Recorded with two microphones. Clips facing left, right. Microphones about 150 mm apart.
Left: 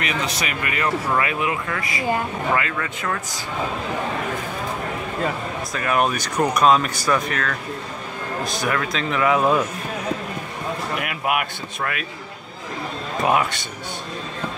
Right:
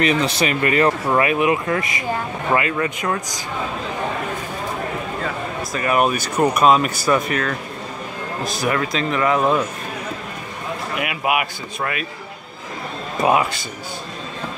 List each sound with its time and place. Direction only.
0.0 s speech: 30° right (ahead or behind)
1.2 s speech: 20° right (ahead or behind)
5.7 s speech: 5° right (ahead or behind)
11.0 s speech: 5° right (ahead or behind)
13.2 s speech: 5° right (ahead or behind)